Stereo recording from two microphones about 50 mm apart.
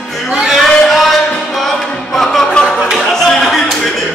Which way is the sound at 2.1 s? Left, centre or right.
Centre.